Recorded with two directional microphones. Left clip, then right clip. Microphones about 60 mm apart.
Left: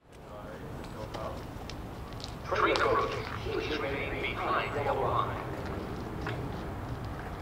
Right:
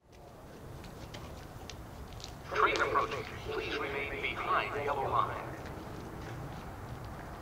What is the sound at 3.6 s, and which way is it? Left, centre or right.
Vehicle, centre.